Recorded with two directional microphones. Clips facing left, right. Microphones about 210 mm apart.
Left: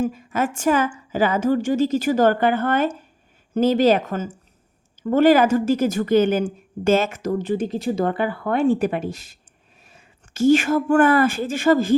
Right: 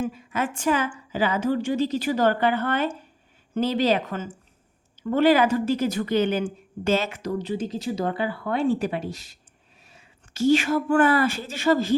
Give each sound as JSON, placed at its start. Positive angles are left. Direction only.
{"t": 0.0, "sound": "a woman's voice", "side_deg": 45}